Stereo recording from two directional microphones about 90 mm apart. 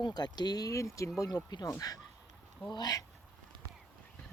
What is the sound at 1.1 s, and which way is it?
Speech, 45° left (ahead or behind).